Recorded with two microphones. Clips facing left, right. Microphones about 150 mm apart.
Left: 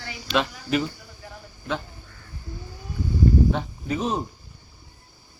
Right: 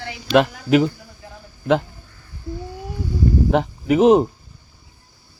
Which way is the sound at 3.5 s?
90° right.